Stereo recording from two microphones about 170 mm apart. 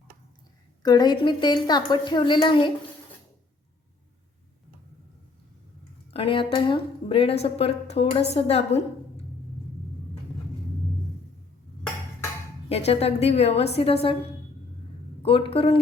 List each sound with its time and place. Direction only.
0.8 s a woman's voice: 25° left (ahead or behind)
6.1 s speech: 30° left (ahead or behind)
12.6 s speech: 35° left (ahead or behind)
15.2 s speech: 35° left (ahead or behind)